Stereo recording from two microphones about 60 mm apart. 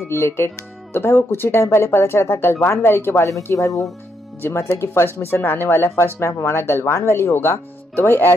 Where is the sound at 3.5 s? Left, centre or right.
Left.